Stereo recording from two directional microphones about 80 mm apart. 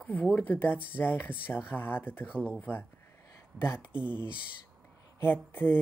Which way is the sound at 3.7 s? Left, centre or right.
Centre.